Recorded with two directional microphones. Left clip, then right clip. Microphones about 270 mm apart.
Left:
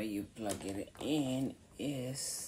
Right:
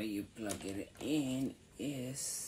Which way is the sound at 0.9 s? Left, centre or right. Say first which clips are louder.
Left 1 dB; centre.